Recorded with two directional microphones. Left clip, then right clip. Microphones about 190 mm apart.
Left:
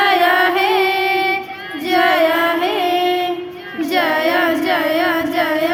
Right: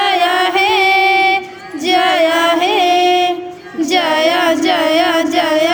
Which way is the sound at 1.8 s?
40° right (ahead or behind).